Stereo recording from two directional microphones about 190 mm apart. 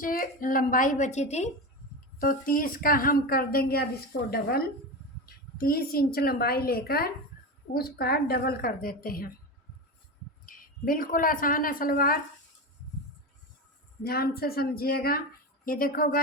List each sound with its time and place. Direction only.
0.0 s a woman's voice: 45° left (ahead or behind)
2.2 s a woman's voice: 50° left (ahead or behind)
10.4 s a woman's voice: 45° left (ahead or behind)
14.0 s a woman's voice: 55° left (ahead or behind)